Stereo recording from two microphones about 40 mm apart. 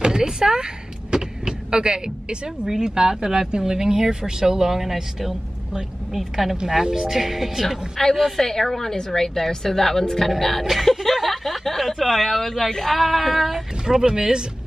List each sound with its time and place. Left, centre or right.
0.0 s door: centre
1.1 s a woman's voice: centre
8.0 s a woman's voice: centre
13.8 s speech: centre